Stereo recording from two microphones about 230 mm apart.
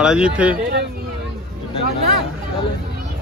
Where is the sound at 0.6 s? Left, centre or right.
Right.